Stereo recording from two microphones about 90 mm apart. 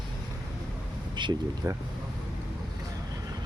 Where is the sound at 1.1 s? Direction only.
60° right (ahead or behind).